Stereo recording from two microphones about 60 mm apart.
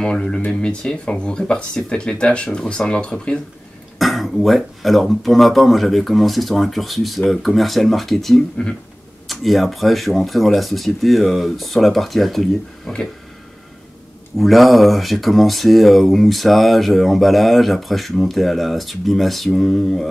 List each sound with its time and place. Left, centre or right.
0.0 s speech: centre
4.0 s speech: centre
14.3 s speech: centre